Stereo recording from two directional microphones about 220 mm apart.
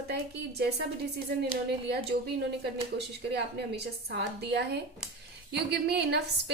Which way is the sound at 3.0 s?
50° right (ahead or behind).